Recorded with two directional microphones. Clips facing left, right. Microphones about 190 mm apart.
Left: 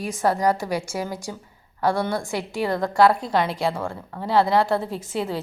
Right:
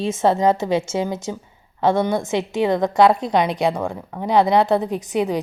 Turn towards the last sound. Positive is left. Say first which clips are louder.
# right 6 dB
turn(degrees=-15)  # may be behind; listen again after turning